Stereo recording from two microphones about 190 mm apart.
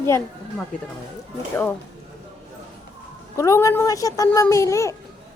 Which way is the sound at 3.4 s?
15° left (ahead or behind).